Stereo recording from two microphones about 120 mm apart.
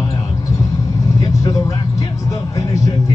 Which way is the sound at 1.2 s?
30° left (ahead or behind).